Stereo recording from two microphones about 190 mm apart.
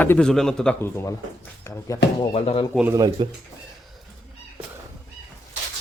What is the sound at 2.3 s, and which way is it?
Speech, 30° left (ahead or behind).